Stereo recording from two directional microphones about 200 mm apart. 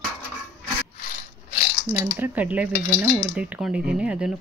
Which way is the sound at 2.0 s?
10° right (ahead or behind).